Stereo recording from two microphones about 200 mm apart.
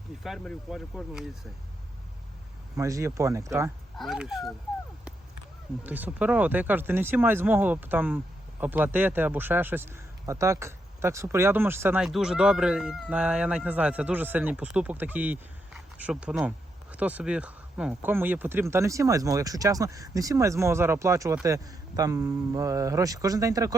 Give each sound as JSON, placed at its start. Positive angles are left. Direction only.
{"t": 0.2, "sound": "speech", "side_deg": 0}
{"t": 2.7, "sound": "a man's voice", "side_deg": -15}
{"t": 3.9, "sound": "speech", "side_deg": 0}
{"t": 5.8, "sound": "a man's voice", "side_deg": -10}